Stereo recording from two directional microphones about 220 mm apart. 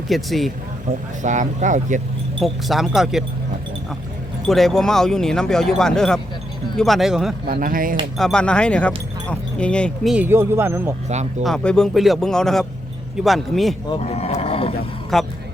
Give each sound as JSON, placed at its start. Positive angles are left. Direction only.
{"t": 0.1, "sound": "speech", "side_deg": 0}
{"t": 1.2, "sound": "speech", "side_deg": -35}
{"t": 2.4, "sound": "speech", "side_deg": 0}
{"t": 4.4, "sound": "speech", "side_deg": 0}
{"t": 7.4, "sound": "speech", "side_deg": -40}
{"t": 8.2, "sound": "speech", "side_deg": 5}
{"t": 11.1, "sound": "speech", "side_deg": -30}
{"t": 11.4, "sound": "speech", "side_deg": 5}
{"t": 14.0, "sound": "roaring cats", "side_deg": 30}
{"t": 15.1, "sound": "speech", "side_deg": 0}